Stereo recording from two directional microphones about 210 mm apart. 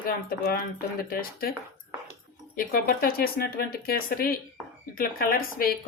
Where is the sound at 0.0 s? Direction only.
45° left (ahead or behind).